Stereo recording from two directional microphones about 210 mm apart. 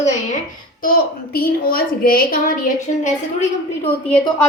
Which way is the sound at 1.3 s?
45° left (ahead or behind).